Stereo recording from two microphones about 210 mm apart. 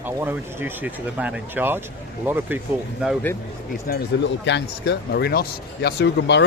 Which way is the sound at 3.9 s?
60° left (ahead or behind).